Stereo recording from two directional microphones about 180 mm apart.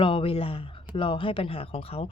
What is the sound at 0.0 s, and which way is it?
Speech, 30° left (ahead or behind).